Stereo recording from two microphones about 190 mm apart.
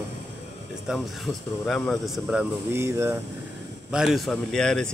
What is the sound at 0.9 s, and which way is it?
A man's voice, 5° right (ahead or behind).